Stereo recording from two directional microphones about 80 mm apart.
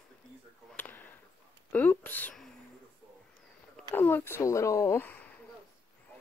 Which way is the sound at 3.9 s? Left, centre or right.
Left.